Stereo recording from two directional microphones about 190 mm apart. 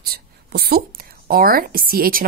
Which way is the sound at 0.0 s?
55° right (ahead or behind).